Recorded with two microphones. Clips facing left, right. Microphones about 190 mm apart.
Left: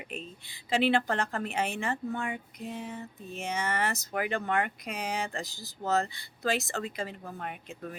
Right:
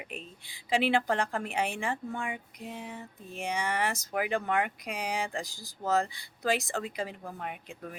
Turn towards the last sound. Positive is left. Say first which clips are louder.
# right 1 dB
turn(degrees=-10)  # may be behind; listen again after turning